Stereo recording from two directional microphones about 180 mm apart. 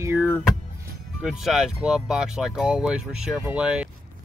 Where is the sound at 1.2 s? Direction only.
Centre (ahead or behind).